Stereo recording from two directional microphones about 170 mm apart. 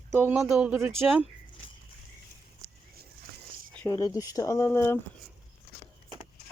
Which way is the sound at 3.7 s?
15° left (ahead or behind).